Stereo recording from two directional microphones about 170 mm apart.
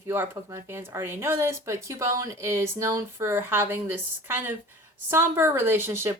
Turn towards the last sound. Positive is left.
turn(degrees=-15)  # may be behind; listen again after turning